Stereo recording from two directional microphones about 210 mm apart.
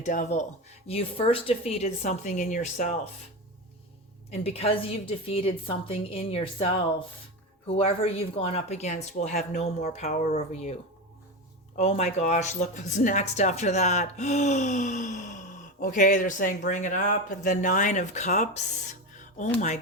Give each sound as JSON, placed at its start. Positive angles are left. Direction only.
{"t": 0.0, "sound": "speech", "side_deg": 35}
{"t": 4.3, "sound": "a woman's voice", "side_deg": 30}
{"t": 11.8, "sound": "speech", "side_deg": 30}